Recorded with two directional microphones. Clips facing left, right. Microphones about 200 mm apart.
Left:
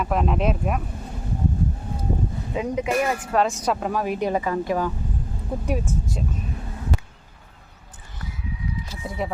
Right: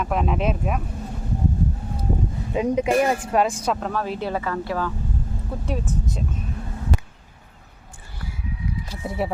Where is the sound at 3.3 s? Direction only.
15° right (ahead or behind).